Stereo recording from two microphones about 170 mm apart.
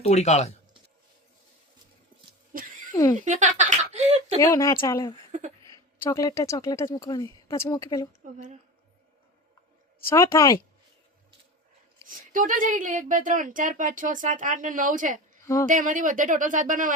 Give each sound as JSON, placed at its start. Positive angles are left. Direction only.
{"t": 0.0, "sound": "speech", "side_deg": 40}
{"t": 2.5, "sound": "a sound", "side_deg": -55}
{"t": 2.9, "sound": "speech", "side_deg": 25}
{"t": 3.2, "sound": "a sound", "side_deg": -45}
{"t": 4.4, "sound": "a woman's voice", "side_deg": 20}
{"t": 10.1, "sound": "a woman's voice", "side_deg": 20}
{"t": 12.0, "sound": "speech", "side_deg": -50}